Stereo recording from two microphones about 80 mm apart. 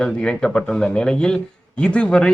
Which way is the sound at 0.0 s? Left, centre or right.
Centre.